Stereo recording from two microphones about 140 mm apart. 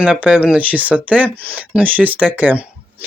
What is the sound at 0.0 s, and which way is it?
Speech, 5° right (ahead or behind).